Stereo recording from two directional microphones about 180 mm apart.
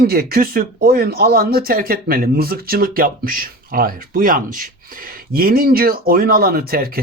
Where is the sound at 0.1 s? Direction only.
55° right (ahead or behind).